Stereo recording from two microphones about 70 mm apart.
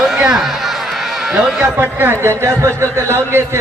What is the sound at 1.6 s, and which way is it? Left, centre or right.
Speech, right.